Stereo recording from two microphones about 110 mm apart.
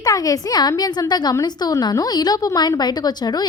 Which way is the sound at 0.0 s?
35° left (ahead or behind).